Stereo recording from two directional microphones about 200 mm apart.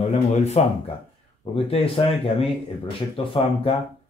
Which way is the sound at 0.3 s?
35° left (ahead or behind).